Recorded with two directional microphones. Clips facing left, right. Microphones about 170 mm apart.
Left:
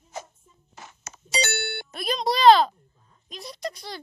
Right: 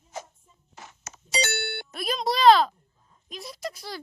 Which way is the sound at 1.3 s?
60° left (ahead or behind).